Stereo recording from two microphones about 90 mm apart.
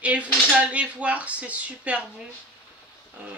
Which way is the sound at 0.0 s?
15° right (ahead or behind).